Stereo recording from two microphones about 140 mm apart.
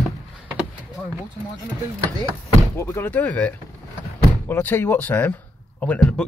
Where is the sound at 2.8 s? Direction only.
15° left (ahead or behind).